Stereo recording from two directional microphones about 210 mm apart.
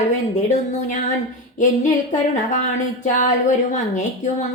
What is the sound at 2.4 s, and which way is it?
A woman's voice, 35° left (ahead or behind).